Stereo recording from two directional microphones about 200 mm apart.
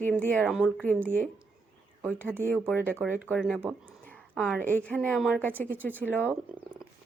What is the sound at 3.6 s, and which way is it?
Speech, 10° right (ahead or behind).